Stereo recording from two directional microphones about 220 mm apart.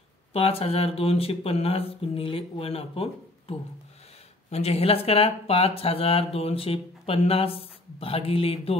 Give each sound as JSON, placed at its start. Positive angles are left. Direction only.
{"t": 0.3, "sound": "speech", "side_deg": 25}